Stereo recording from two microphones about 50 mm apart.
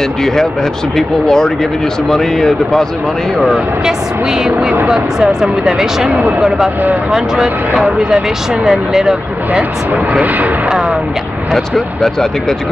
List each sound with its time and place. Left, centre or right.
0.9 s speech: centre
3.5 s speech: centre
9.5 s speech: right
10.7 s speech: centre
11.5 s speech: centre